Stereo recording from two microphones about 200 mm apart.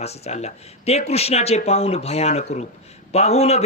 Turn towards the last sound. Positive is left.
turn(degrees=30)  # may be behind; listen again after turning